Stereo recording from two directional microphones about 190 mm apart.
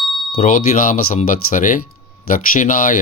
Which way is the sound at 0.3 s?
45° left (ahead or behind).